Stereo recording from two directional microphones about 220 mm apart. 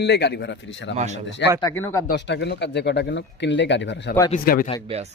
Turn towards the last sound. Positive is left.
turn(degrees=35)  # may be behind; listen again after turning